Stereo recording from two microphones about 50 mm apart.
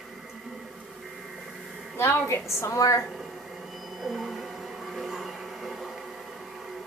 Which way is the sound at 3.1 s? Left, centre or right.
Centre.